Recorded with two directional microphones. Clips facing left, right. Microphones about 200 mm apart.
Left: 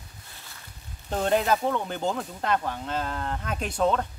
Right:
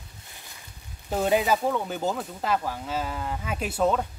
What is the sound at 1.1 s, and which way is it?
Speech, 5° right (ahead or behind).